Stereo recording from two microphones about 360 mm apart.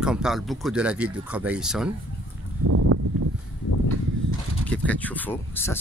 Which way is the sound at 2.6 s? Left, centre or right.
Right.